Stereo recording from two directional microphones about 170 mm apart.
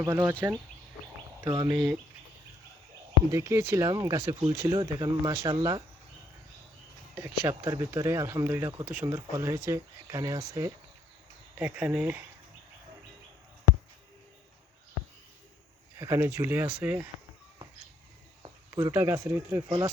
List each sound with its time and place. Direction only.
0.0 s speech: 15° right (ahead or behind)
3.3 s speech: 15° right (ahead or behind)
4.4 s speech: 30° right (ahead or behind)
4.8 s speech: 20° right (ahead or behind)
7.2 s speech: 15° right (ahead or behind)
16.0 s speech: 15° right (ahead or behind)
18.7 s speech: 15° right (ahead or behind)